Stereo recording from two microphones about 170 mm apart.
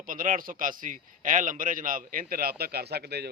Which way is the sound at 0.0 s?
50° right (ahead or behind).